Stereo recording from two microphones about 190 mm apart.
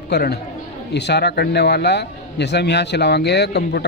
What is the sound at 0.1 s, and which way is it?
A man's voice, 60° left (ahead or behind).